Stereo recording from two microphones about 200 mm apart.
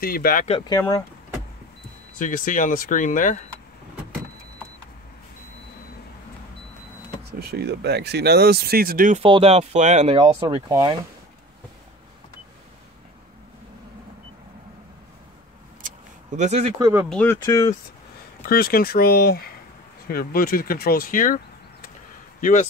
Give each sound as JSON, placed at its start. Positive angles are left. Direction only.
{"t": 0.0, "sound": "speech", "side_deg": 45}
{"t": 0.5, "sound": "speech", "side_deg": 20}
{"t": 2.1, "sound": "speech", "side_deg": 40}
{"t": 7.2, "sound": "speech", "side_deg": -50}
{"t": 9.2, "sound": "speech", "side_deg": -30}
{"t": 16.3, "sound": "speech", "side_deg": -35}
{"t": 16.7, "sound": "speech", "side_deg": -10}
{"t": 17.1, "sound": "speech", "side_deg": 10}
{"t": 18.5, "sound": "speech", "side_deg": 50}
{"t": 22.4, "sound": "speech", "side_deg": 40}